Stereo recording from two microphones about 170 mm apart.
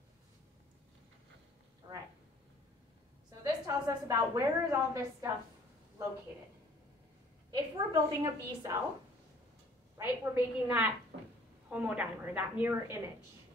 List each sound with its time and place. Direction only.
3.4 s a woman's voice: 20° right (ahead or behind)
7.5 s a woman's voice: 25° right (ahead or behind)
9.9 s a woman's voice: 15° right (ahead or behind)